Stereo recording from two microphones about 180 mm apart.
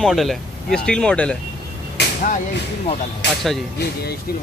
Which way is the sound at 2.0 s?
70° left (ahead or behind).